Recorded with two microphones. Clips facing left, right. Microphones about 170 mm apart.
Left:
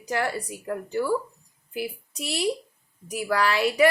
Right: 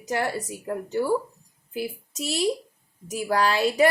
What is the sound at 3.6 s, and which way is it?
Speech, 25° right (ahead or behind).